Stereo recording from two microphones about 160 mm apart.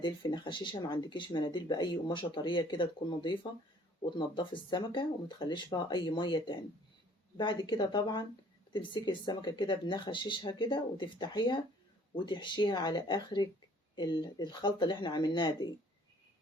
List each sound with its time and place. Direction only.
0.0 s speech: 30° left (ahead or behind)